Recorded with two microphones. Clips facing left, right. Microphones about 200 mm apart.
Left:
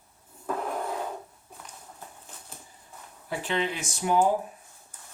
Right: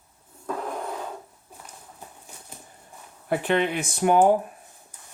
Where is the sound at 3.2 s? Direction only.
60° right (ahead or behind).